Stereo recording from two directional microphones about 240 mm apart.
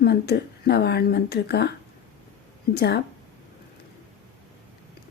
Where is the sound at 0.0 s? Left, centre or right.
Left.